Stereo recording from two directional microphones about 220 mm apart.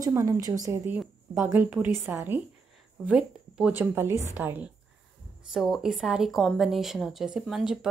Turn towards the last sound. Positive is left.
turn(degrees=0)  # may be behind; listen again after turning